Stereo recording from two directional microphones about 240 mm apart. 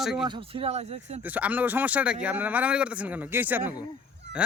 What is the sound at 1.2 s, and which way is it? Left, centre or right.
Speech, centre.